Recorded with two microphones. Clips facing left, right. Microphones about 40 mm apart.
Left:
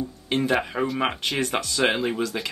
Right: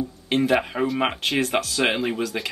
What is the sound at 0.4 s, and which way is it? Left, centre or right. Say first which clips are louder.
Speech: right 2 dB; centre.